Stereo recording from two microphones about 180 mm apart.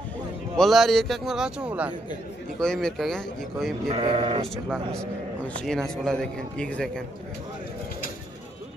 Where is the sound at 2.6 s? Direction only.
5° left (ahead or behind).